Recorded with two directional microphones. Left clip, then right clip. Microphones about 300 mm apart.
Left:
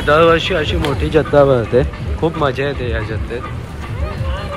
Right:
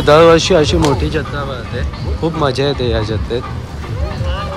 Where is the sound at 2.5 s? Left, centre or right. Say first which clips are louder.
Right 4 dB; centre.